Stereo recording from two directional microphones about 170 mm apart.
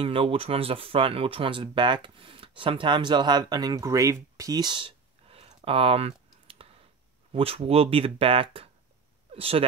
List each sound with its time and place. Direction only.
0.0 s speech: 35° right (ahead or behind)